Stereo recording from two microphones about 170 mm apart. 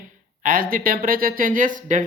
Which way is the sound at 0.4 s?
55° right (ahead or behind).